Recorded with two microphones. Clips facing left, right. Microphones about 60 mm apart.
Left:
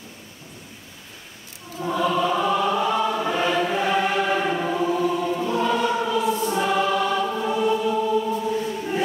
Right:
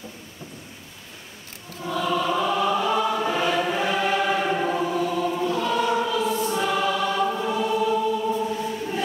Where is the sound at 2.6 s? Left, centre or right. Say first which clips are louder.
Left 1 dB; centre.